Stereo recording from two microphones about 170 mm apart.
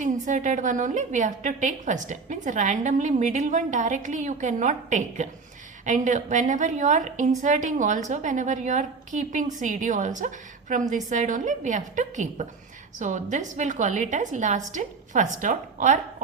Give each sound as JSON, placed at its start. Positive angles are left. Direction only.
{"t": 0.0, "sound": "a woman's voice", "side_deg": -45}